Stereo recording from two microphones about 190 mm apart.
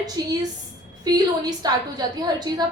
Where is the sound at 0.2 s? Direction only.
20° right (ahead or behind).